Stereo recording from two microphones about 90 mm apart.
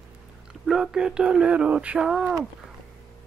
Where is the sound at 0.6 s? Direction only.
5° right (ahead or behind).